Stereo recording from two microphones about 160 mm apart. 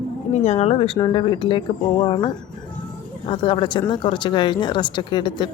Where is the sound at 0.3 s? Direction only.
40° left (ahead or behind).